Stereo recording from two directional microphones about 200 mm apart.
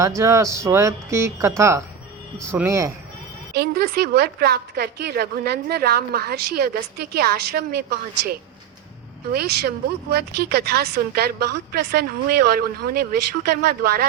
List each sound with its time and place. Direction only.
0.2 s speech: 15° right (ahead or behind)
3.5 s a woman's voice: 50° right (ahead or behind)